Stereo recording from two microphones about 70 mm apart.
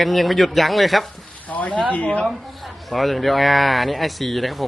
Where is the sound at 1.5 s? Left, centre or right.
Centre.